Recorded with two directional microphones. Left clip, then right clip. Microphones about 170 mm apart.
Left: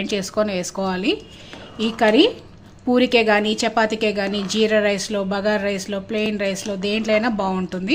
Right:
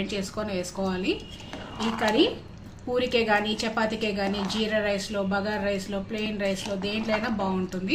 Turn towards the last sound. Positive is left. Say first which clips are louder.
# left 6 dB
turn(degrees=65)  # may be behind; listen again after turning